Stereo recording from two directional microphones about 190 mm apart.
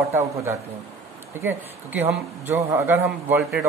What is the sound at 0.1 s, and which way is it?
A woman's voice, 15° right (ahead or behind).